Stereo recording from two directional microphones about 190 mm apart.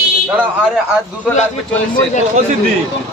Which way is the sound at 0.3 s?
10° right (ahead or behind).